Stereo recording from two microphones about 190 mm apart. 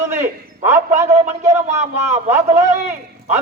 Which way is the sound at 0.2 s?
15° right (ahead or behind).